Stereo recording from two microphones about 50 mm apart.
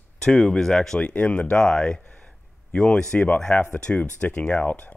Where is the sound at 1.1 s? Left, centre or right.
Left.